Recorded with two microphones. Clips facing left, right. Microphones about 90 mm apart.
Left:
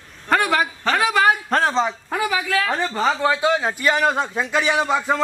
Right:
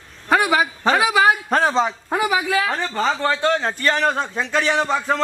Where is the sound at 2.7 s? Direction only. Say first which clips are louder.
Left 1 dB; 5° left (ahead or behind).